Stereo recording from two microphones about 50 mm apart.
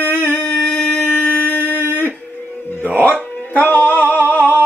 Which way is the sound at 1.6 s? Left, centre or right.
Right.